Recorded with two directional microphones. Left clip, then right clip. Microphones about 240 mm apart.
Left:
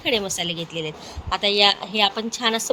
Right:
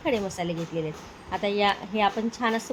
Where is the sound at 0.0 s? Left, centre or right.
Left.